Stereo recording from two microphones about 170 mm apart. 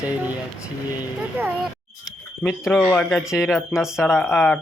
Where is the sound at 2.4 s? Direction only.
5° left (ahead or behind).